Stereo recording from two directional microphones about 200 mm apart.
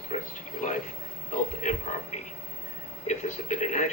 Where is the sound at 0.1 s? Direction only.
35° left (ahead or behind).